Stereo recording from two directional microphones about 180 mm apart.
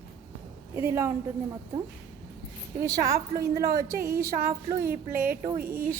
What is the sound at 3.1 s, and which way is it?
Speech, 60° right (ahead or behind).